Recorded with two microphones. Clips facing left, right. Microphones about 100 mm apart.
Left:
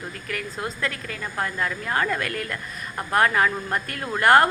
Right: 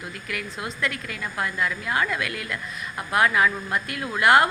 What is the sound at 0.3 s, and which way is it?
A woman's voice, 40° left (ahead or behind).